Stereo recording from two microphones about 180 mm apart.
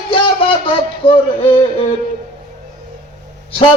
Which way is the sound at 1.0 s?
30° left (ahead or behind).